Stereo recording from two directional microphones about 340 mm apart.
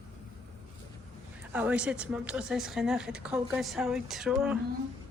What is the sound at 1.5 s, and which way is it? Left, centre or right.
A woman's voice, centre.